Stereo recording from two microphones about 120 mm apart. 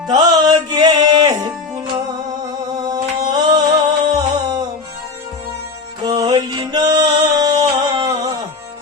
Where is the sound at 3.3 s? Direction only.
35° right (ahead or behind).